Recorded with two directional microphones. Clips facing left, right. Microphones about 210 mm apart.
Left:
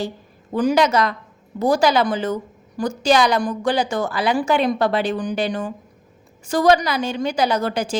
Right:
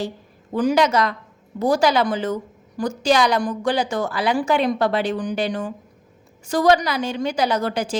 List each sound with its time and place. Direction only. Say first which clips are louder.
0.5 s a woman's voice: left 1 dB; 35° left (ahead or behind)